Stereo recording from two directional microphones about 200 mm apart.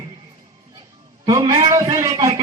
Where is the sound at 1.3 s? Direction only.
20° right (ahead or behind).